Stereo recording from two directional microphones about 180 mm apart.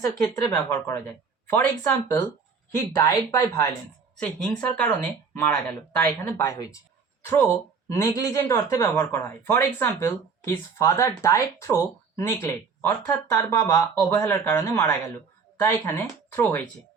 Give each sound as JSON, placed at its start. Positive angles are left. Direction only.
{"t": 0.0, "sound": "a woman's voice", "side_deg": 15}
{"t": 4.8, "sound": "a woman's voice", "side_deg": 10}